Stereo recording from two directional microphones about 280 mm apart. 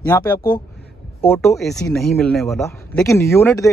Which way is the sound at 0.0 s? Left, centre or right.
Centre.